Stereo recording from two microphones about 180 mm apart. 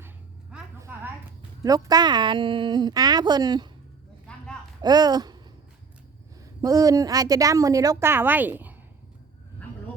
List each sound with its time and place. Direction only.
1.6 s a woman's voice: 20° right (ahead or behind)
4.8 s speech: 20° right (ahead or behind)
6.4 s a woman's voice: 20° right (ahead or behind)